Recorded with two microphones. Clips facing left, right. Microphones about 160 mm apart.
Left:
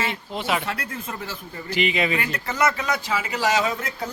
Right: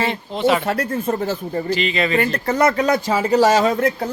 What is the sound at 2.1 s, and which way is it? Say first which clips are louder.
Speech: right 8 dB; 45° right (ahead or behind).